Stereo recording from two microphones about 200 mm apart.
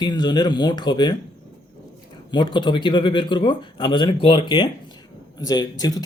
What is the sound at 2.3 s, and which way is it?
Speech, 25° left (ahead or behind).